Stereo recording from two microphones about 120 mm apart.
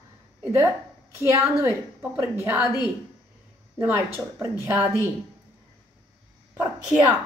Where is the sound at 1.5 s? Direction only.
20° right (ahead or behind).